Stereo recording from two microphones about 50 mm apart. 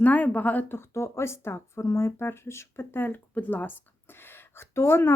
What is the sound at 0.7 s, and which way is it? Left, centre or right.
Speech, left.